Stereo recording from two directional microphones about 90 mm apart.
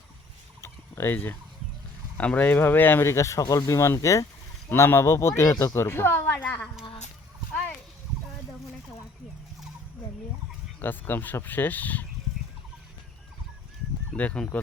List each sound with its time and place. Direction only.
0.6 s a sound: 25° left (ahead or behind)
2.1 s speech: 15° left (ahead or behind)
3.0 s speech: 35° left (ahead or behind); by 6.7 s 20° left (ahead or behind)
10.8 s speech: 25° left (ahead or behind)
14.2 s speech: 15° left (ahead or behind)